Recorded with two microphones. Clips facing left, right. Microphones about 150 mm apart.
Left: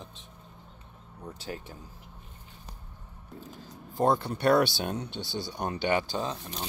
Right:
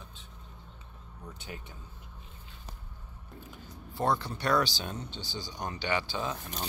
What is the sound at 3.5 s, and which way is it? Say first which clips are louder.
Speech: left 6 dB; 45° left (ahead or behind).